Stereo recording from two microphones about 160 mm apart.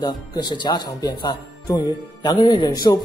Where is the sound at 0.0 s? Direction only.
25° left (ahead or behind).